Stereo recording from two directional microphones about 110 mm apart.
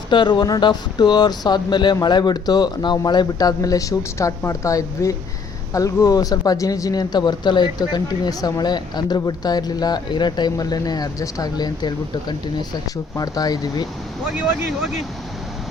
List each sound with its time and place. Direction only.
0.1 s speech: 45° left (ahead or behind)